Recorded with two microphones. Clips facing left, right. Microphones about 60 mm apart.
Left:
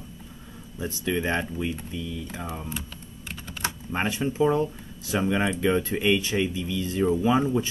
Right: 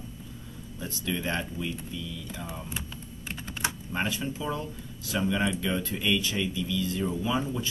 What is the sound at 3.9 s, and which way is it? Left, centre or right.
Speech, left.